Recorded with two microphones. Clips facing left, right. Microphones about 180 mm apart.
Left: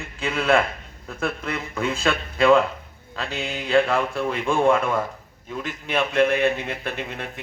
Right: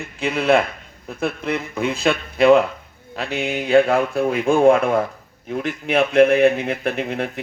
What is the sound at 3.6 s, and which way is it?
A man's voice, 40° right (ahead or behind).